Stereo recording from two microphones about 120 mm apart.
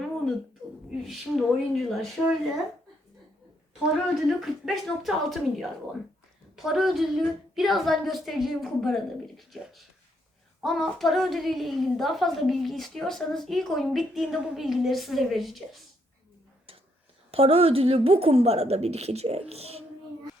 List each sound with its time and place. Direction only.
0.9 s a woman's voice: centre (ahead or behind)
3.9 s a woman's voice: centre (ahead or behind)
17.3 s a woman's voice: 55° right (ahead or behind)